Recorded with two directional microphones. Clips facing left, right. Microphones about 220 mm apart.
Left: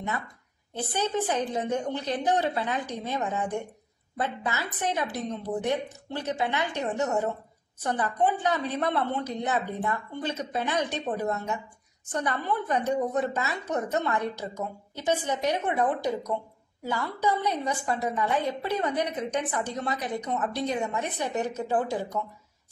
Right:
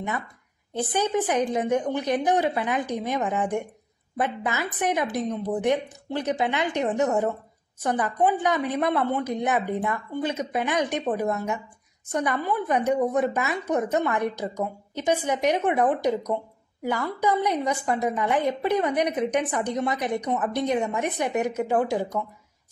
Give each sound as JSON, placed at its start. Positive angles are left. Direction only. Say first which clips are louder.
{"t": 0.7, "sound": "a woman's voice", "louder": "right 4 dB", "side_deg": -15}